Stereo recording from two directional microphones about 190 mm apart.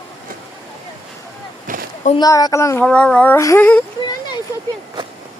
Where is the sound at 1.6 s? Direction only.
45° right (ahead or behind).